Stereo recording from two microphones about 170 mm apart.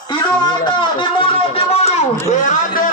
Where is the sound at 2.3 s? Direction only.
50° left (ahead or behind).